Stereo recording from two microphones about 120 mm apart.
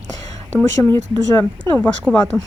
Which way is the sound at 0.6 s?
20° left (ahead or behind).